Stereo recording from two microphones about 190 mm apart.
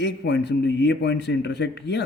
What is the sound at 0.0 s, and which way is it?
A man's voice, 65° left (ahead or behind).